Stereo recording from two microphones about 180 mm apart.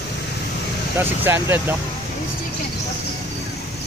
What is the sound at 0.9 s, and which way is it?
Speech, 10° right (ahead or behind).